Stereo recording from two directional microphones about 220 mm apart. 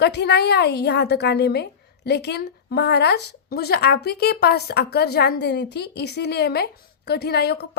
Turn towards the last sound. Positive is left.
turn(degrees=45)  # may be behind; listen again after turning